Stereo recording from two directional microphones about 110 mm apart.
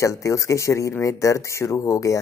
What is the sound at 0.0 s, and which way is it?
Speech, 30° left (ahead or behind).